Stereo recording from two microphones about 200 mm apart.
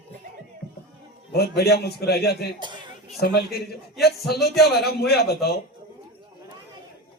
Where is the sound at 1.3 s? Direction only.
50° left (ahead or behind).